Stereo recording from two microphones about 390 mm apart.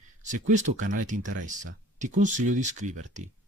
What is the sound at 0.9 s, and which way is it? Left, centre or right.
Speech, centre.